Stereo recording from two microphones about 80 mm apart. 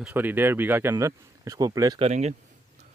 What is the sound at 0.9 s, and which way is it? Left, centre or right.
Speech, right.